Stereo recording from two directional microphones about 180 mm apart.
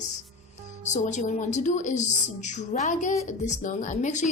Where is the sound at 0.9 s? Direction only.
40° left (ahead or behind).